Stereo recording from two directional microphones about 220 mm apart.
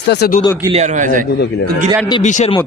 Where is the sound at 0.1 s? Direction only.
45° left (ahead or behind).